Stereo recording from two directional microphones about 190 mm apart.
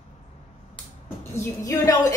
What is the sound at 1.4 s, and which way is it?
Speech, 15° left (ahead or behind).